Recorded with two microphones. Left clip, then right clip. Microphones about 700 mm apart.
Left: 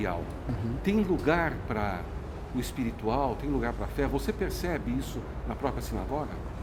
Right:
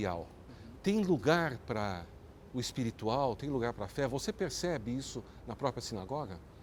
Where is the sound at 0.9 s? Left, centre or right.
Right.